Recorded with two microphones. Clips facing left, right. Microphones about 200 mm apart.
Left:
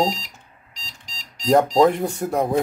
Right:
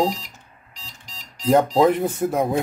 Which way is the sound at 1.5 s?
Centre (ahead or behind).